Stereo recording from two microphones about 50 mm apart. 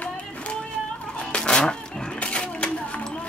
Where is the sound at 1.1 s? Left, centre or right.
Left.